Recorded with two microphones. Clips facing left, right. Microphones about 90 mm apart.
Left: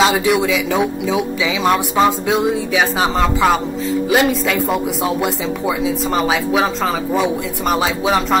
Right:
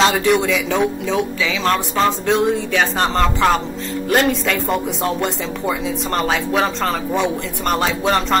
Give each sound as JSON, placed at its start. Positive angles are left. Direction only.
{"t": 0.0, "sound": "speech", "side_deg": 5}